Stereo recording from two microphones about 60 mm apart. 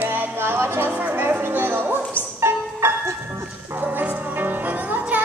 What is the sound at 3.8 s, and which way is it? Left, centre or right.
Music, right.